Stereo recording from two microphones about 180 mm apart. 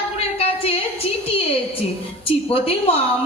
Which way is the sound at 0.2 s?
35° left (ahead or behind).